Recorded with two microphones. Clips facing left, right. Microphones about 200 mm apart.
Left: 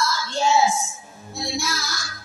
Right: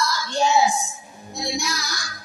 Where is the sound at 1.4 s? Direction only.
15° right (ahead or behind).